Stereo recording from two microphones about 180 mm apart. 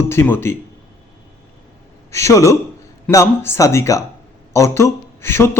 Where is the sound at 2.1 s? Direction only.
15° left (ahead or behind).